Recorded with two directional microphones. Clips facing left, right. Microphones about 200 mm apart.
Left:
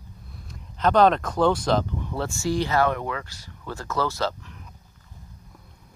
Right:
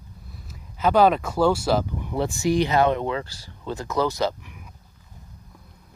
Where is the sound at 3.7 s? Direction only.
15° right (ahead or behind).